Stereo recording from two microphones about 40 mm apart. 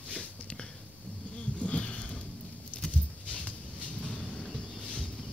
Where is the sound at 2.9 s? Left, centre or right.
Left.